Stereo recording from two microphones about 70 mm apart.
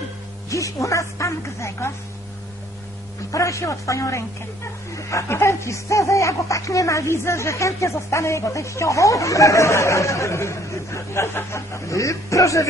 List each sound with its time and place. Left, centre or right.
0.5 s speech: left
3.3 s speech: left